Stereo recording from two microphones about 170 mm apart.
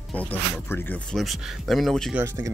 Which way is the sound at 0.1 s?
10° left (ahead or behind).